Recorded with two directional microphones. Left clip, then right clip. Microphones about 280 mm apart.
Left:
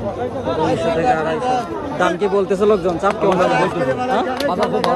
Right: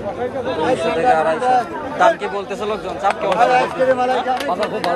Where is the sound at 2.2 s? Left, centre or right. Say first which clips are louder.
Left 7 dB; centre.